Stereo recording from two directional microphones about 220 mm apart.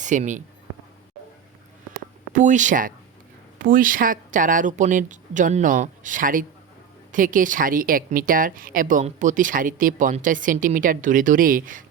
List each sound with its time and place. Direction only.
0.0 s speech: 35° right (ahead or behind)
2.3 s speech: 35° right (ahead or behind)